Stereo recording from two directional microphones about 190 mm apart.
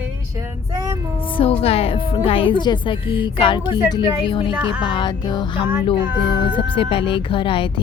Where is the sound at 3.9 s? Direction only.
25° left (ahead or behind).